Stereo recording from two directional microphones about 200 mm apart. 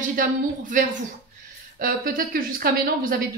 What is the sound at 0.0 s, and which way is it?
A woman's voice, 40° right (ahead or behind).